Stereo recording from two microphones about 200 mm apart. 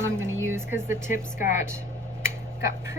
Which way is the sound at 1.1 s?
40° left (ahead or behind).